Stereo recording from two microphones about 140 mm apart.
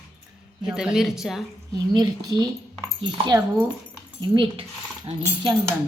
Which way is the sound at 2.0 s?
30° right (ahead or behind).